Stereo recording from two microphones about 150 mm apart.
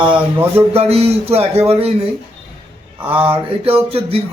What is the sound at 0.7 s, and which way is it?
Speech, 45° right (ahead or behind).